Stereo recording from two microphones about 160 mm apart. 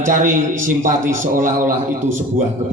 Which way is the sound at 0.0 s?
55° right (ahead or behind).